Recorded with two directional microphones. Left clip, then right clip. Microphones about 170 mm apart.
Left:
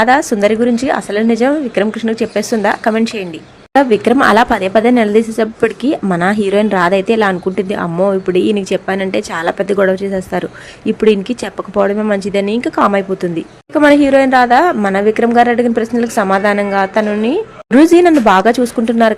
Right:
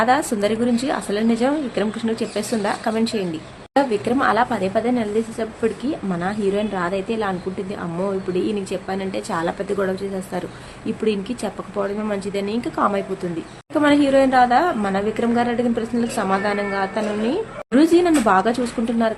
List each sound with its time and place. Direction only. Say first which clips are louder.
0.0 s a woman's voice: left 8 dB; 40° left (ahead or behind)